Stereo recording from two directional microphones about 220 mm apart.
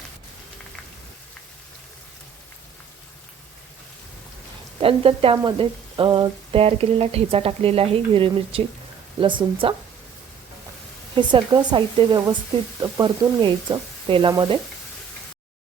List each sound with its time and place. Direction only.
4.8 s frying: 25° right (ahead or behind)
11.2 s frying: 20° right (ahead or behind)